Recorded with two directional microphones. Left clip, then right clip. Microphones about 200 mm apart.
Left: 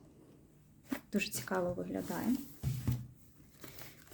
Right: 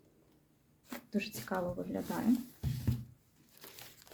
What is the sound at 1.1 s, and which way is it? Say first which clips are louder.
Speech: left 1 dB; 30° left (ahead or behind).